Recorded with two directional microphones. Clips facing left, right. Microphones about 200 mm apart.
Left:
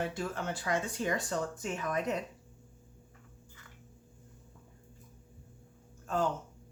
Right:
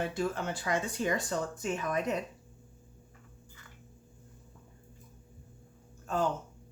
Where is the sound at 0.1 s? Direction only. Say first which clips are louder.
Right 3 dB; 15° right (ahead or behind).